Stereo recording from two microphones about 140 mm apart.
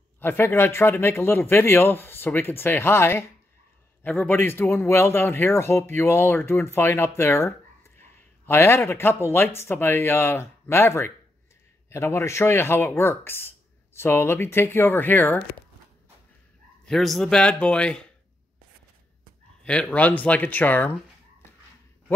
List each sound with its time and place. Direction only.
0.2 s speech: 15° left (ahead or behind)
16.8 s speech: centre (ahead or behind)
19.6 s speech: 10° left (ahead or behind)